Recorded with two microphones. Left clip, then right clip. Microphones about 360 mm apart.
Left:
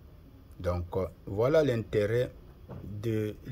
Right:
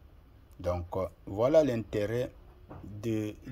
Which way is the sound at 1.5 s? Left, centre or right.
Centre.